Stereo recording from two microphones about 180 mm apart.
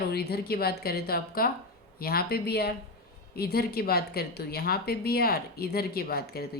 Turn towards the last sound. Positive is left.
turn(degrees=60)  # may be behind; listen again after turning